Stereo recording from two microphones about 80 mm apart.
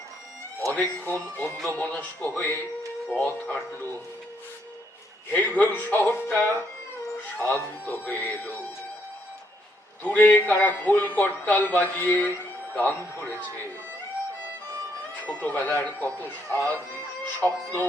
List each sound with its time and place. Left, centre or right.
0.7 s speech: left
3.1 s speech: left
5.3 s speech: left
10.0 s speech: left
15.3 s speech: left